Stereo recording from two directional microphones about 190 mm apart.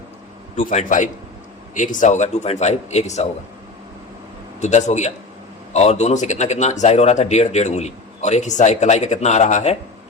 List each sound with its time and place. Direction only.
0.5 s speech: 40° left (ahead or behind)
4.6 s speech: 40° left (ahead or behind)